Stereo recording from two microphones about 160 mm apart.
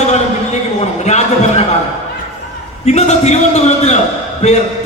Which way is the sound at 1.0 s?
45° left (ahead or behind).